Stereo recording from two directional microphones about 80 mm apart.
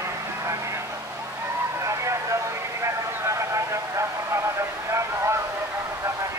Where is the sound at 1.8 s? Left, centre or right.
Right.